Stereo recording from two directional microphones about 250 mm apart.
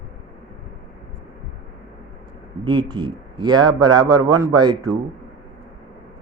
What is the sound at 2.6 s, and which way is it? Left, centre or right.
Speech, centre.